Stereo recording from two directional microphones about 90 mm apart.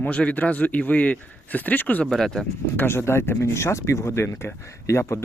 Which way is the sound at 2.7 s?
25° left (ahead or behind).